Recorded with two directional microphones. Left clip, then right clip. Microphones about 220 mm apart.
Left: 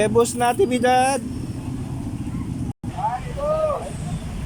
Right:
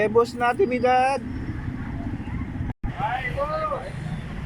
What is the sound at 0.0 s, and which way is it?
Speech, 10° left (ahead or behind).